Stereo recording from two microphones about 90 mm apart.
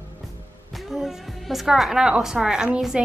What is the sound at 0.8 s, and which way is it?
A woman's voice, centre (ahead or behind).